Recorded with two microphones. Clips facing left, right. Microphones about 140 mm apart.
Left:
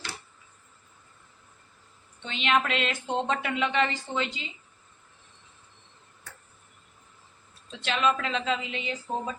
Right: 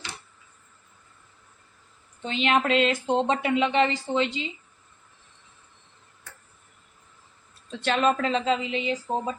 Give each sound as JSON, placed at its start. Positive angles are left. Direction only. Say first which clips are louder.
{"t": 2.2, "sound": "speech", "louder": "right 3 dB", "side_deg": -35}
{"t": 7.7, "sound": "speech", "louder": "right 3 dB", "side_deg": -45}